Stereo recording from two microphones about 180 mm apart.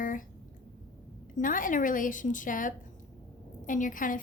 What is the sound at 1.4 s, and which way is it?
Speech, 50° left (ahead or behind).